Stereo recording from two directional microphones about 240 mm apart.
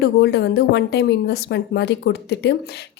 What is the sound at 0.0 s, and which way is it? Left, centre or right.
A woman's voice, left.